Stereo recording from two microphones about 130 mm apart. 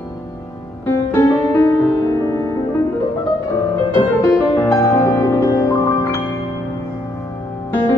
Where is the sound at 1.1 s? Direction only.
20° left (ahead or behind).